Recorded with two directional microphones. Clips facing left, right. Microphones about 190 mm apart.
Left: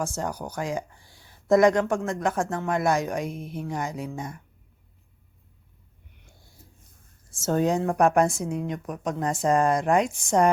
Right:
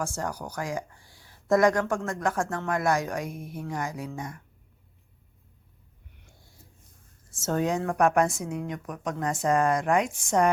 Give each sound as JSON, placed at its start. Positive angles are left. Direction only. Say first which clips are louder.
{"t": 0.0, "sound": "speech", "louder": "left 2 dB", "side_deg": 20}
{"t": 7.3, "sound": "a woman's voice", "louder": "left 3 dB", "side_deg": 30}